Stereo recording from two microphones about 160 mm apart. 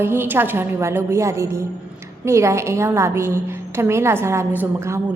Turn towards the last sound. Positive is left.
turn(degrees=-15)  # may be behind; listen again after turning